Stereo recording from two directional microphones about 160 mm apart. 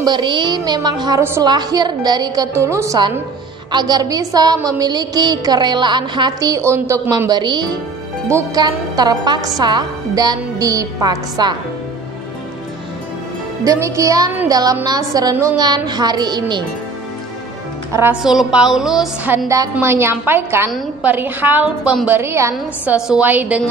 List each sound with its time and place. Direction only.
0.0 s a woman's voice: 30° right (ahead or behind)
13.7 s a woman's voice: 20° right (ahead or behind)
18.1 s a woman's voice: 5° right (ahead or behind)
19.3 s a woman's voice: 20° right (ahead or behind)